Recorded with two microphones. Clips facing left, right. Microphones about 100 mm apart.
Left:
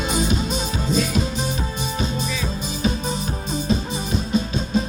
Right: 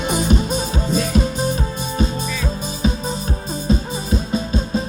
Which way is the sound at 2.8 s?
35° right (ahead or behind).